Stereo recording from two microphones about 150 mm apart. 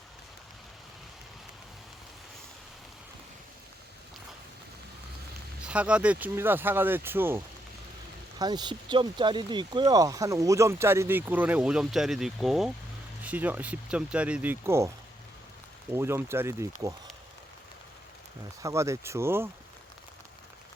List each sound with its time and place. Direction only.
5.6 s speech: 10° right (ahead or behind)
8.4 s speech: 30° right (ahead or behind)
18.6 s speech: 20° right (ahead or behind)